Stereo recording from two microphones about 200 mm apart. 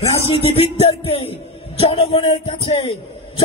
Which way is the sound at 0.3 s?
30° left (ahead or behind).